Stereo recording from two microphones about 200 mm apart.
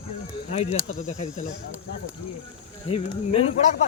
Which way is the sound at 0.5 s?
30° left (ahead or behind).